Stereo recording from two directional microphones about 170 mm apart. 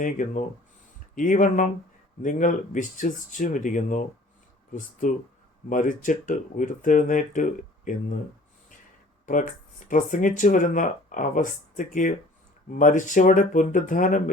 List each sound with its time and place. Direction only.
0.0 s speech: 50° left (ahead or behind)
9.2 s speech: 50° left (ahead or behind)